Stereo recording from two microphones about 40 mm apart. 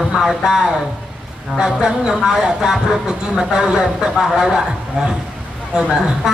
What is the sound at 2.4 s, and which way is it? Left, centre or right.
Speech, centre.